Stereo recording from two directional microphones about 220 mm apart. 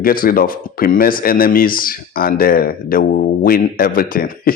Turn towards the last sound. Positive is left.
turn(degrees=40)  # may be behind; listen again after turning